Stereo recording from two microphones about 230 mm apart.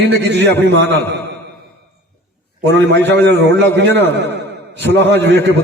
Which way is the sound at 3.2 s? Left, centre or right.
Right.